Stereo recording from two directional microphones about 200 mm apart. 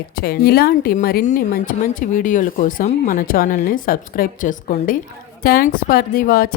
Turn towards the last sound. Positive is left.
turn(degrees=45)  # may be behind; listen again after turning